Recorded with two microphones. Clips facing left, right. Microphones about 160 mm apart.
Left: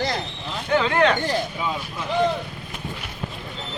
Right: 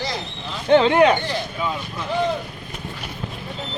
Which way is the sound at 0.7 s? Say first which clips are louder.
Right 6 dB; 25° right (ahead or behind).